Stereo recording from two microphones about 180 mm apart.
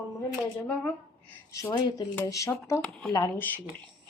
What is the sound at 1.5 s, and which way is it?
A woman's voice, 25° left (ahead or behind).